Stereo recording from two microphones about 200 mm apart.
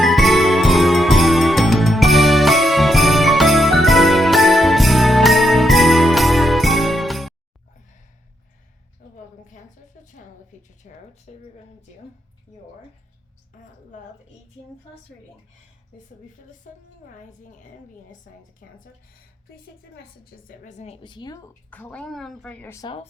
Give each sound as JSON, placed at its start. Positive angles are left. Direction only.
{"t": 0.0, "sound": "music", "side_deg": 0}
{"t": 10.8, "sound": "a sound", "side_deg": 40}
{"t": 16.7, "sound": "a woman's voice", "side_deg": 40}
{"t": 20.5, "sound": "a woman's voice", "side_deg": 40}
{"t": 21.7, "sound": "a woman's voice", "side_deg": 10}